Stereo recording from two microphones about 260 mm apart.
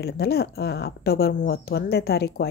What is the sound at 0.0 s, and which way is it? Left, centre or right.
A woman's voice, left.